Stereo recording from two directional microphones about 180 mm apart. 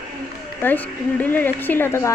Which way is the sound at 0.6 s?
10° left (ahead or behind).